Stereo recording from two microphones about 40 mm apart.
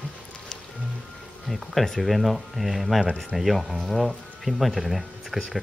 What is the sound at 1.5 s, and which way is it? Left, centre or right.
Speech, centre.